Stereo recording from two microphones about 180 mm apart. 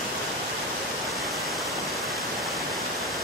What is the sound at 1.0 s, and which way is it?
Waterfall, centre (ahead or behind).